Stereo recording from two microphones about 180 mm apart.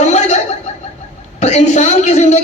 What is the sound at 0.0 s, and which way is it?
Chuckle, 40° left (ahead or behind).